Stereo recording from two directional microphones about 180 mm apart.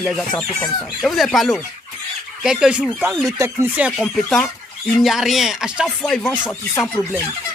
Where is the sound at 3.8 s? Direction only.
Centre (ahead or behind).